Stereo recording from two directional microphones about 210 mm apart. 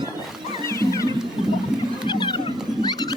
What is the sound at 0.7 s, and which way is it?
Music, 15° left (ahead or behind).